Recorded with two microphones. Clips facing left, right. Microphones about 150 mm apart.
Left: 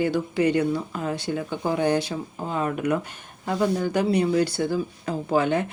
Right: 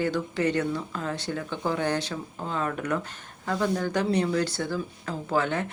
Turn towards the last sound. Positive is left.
turn(degrees=15)  # may be behind; listen again after turning